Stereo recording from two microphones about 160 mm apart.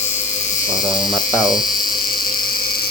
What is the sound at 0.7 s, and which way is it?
Speech, 5° right (ahead or behind).